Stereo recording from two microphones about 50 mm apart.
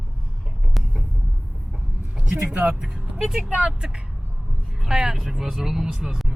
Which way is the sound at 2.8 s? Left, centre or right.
Right.